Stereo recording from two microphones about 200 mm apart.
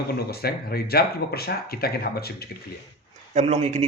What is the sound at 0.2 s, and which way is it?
A man's voice, 50° left (ahead or behind).